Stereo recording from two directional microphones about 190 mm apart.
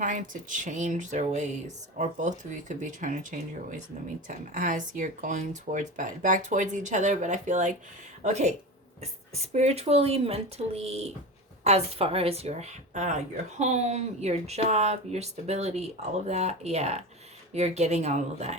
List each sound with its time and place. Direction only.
0.0 s speech: 40° right (ahead or behind)